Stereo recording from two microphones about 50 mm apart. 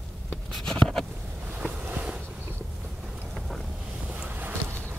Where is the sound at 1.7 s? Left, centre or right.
Right.